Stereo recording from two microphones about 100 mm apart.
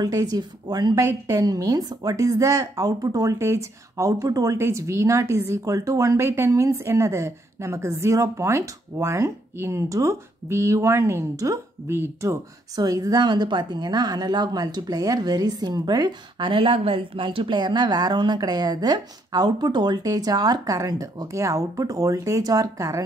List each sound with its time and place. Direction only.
0.0 s a woman's voice: 40° right (ahead or behind); by 17.6 s 60° right (ahead or behind)
17.6 s a woman's voice: 45° right (ahead or behind)